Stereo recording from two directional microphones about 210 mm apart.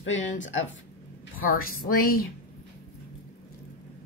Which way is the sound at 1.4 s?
45° left (ahead or behind).